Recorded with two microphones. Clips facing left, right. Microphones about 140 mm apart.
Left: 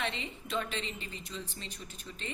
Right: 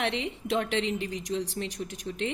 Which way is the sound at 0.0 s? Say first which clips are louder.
Right 7 dB; 75° right (ahead or behind).